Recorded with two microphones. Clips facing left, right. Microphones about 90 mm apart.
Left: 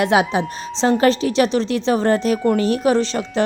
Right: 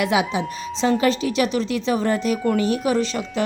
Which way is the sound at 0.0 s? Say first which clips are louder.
Left 4 dB; 40° left (ahead or behind).